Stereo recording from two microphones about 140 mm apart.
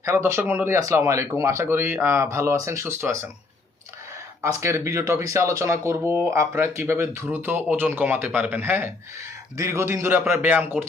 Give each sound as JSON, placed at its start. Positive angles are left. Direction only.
{"t": 0.0, "sound": "speech", "side_deg": -20}
{"t": 4.6, "sound": "a man's voice", "side_deg": -20}